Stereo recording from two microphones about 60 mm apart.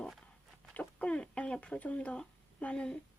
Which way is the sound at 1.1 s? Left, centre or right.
Centre.